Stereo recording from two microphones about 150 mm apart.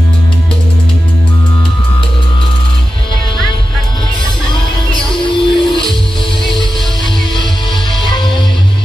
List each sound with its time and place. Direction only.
5.2 s music: 35° left (ahead or behind)